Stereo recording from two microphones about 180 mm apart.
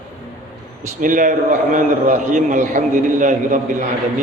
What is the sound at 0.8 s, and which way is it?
A man's voice, 45° right (ahead or behind).